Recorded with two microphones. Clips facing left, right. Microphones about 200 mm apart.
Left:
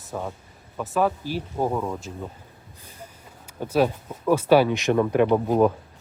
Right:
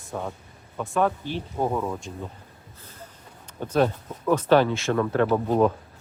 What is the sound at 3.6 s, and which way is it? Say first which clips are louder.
Speech: left 1 dB; 10° left (ahead or behind).